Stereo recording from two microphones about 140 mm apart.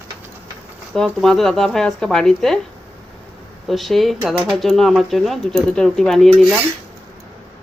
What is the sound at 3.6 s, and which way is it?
Speech, centre (ahead or behind).